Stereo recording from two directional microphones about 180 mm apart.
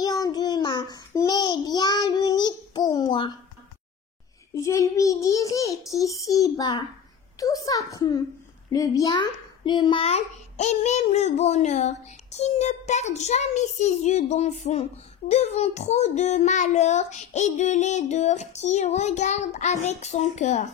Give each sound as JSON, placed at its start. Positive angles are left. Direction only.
{"t": 0.0, "sound": "child singing", "side_deg": 20}
{"t": 4.6, "sound": "a child's voice", "side_deg": 15}